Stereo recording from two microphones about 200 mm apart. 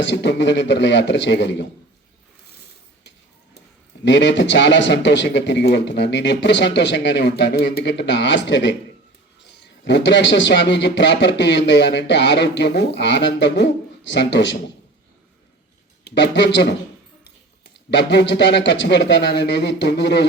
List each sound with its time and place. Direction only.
0.0 s speech: 60° left (ahead or behind)
4.0 s speech: 60° left (ahead or behind)
16.0 s speech: 60° left (ahead or behind)
17.9 s speech: 60° left (ahead or behind)